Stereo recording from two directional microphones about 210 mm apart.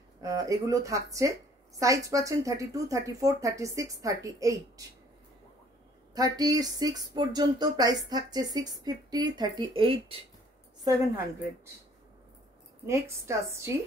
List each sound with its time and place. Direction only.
0.2 s speech: 15° right (ahead or behind)
6.1 s speech: 15° right (ahead or behind)
12.8 s speech: 15° right (ahead or behind)